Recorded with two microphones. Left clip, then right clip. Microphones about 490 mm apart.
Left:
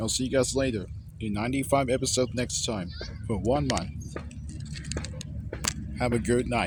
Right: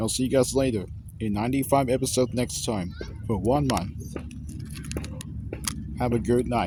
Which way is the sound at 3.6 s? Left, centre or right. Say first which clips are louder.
Right 3 dB; right.